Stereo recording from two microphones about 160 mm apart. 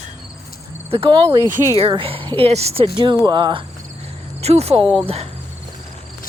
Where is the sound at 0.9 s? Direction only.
35° right (ahead or behind).